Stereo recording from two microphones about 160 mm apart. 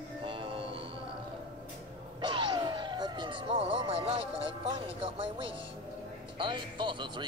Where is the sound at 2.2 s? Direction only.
30° right (ahead or behind).